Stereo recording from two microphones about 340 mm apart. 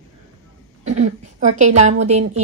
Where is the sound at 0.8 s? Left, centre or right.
Right.